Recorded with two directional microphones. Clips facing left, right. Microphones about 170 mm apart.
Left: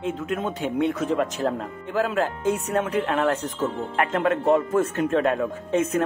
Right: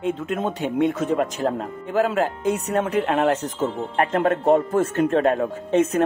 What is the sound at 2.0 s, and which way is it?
Speech, 15° right (ahead or behind).